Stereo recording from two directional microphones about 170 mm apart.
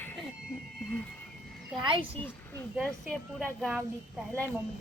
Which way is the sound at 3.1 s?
Centre (ahead or behind).